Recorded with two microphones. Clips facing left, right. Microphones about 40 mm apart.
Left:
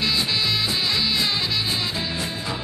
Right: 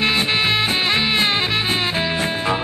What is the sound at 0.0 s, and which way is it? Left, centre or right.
Music, right.